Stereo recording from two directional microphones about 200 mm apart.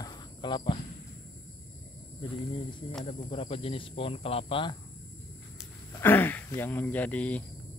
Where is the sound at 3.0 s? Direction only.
30° left (ahead or behind).